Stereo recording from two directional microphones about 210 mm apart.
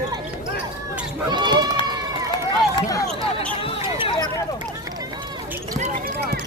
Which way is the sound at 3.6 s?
25° left (ahead or behind).